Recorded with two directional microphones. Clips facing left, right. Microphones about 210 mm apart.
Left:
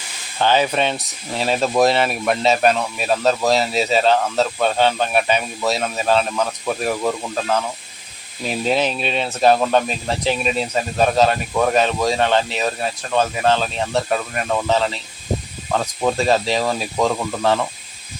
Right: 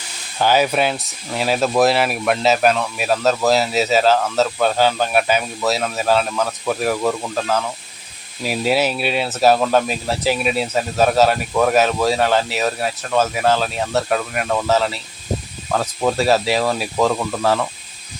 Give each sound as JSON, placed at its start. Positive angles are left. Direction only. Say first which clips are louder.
{"t": 0.3, "sound": "speech", "louder": "right 1 dB", "side_deg": -10}